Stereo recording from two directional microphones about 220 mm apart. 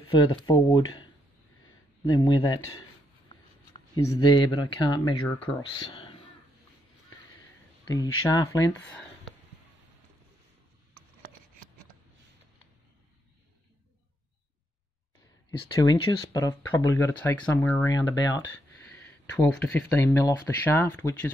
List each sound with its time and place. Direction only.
0.0 s speech: 20° left (ahead or behind)
2.0 s speech: 20° left (ahead or behind)
4.1 s speech: 20° left (ahead or behind)
7.8 s a sound: 15° left (ahead or behind)
8.2 s speech: 15° left (ahead or behind)
15.8 s speech: 15° left (ahead or behind)